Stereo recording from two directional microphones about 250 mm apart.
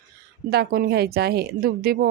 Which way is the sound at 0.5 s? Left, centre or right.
Right.